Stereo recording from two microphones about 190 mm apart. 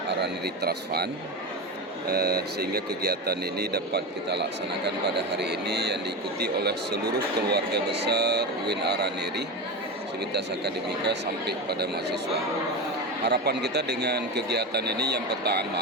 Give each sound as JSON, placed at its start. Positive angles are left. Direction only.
{"t": 0.2, "sound": "speech", "side_deg": -60}
{"t": 2.0, "sound": "speech", "side_deg": -55}
{"t": 11.1, "sound": "speech", "side_deg": -60}